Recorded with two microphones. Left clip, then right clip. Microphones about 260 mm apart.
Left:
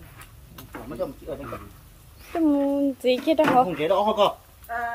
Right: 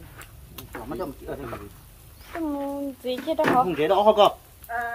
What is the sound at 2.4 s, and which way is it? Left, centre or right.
Speech, left.